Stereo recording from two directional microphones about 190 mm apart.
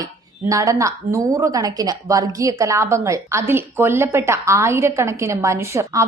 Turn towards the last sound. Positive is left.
turn(degrees=-15)  # may be behind; listen again after turning